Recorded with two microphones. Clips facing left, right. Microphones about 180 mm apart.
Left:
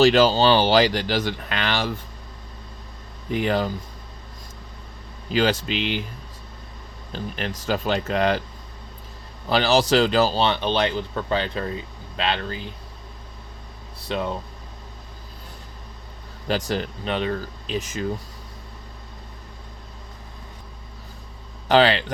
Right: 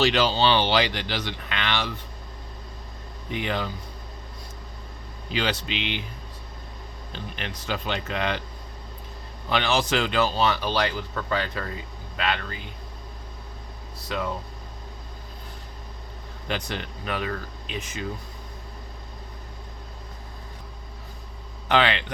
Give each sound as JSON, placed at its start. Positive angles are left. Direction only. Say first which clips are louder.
{"t": 0.0, "sound": "speech", "louder": "left 6 dB", "side_deg": 45}
{"t": 3.3, "sound": "speech", "louder": "left 6 dB", "side_deg": 40}
{"t": 5.3, "sound": "speech", "louder": "left 6 dB", "side_deg": 40}
{"t": 7.1, "sound": "speech", "louder": "left 6 dB", "side_deg": 40}
{"t": 9.5, "sound": "speech", "louder": "left 5 dB", "side_deg": 35}
{"t": 14.1, "sound": "speech", "louder": "left 3 dB", "side_deg": 25}
{"t": 16.5, "sound": "speech", "louder": "left 6 dB", "side_deg": 40}
{"t": 21.7, "sound": "speech", "louder": "left 5 dB", "side_deg": 35}